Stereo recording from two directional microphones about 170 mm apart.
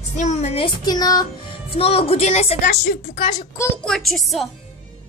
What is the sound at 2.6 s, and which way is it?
Child singing, 50° left (ahead or behind).